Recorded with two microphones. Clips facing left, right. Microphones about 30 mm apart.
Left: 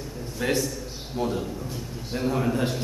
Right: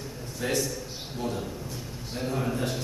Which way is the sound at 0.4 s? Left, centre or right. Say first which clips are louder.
Left 3 dB; centre.